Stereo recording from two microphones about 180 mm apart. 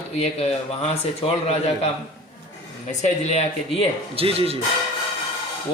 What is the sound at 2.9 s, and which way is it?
Speech, 40° left (ahead or behind).